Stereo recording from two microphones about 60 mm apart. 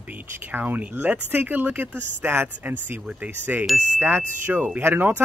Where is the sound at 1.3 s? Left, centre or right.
Right.